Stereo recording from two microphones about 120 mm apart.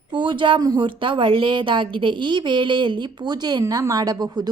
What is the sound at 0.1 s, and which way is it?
A woman's voice, 40° right (ahead or behind).